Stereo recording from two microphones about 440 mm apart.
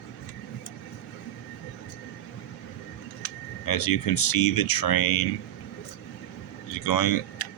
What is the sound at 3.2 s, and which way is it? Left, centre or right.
Speech, left.